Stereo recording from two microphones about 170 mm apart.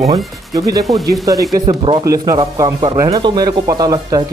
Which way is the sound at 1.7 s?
30° right (ahead or behind).